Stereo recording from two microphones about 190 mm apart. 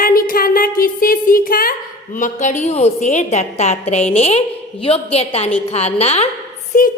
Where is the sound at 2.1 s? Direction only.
40° left (ahead or behind).